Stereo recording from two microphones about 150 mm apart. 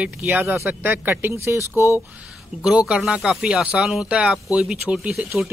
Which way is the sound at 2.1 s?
5° right (ahead or behind).